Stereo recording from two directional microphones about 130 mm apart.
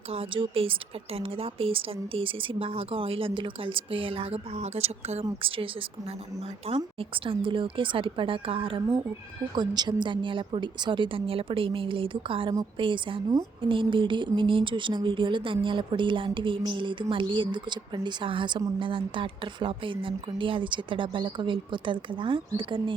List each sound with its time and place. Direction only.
0.1 s speech: 45° right (ahead or behind)
6.7 s speech: 45° right (ahead or behind)
9.6 s speech: 35° right (ahead or behind)